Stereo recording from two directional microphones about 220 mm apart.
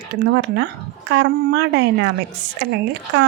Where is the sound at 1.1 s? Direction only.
50° right (ahead or behind).